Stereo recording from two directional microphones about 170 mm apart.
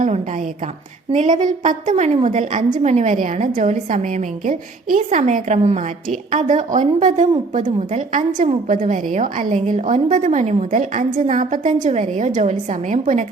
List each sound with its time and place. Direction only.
1.1 s a woman's voice: 45° right (ahead or behind)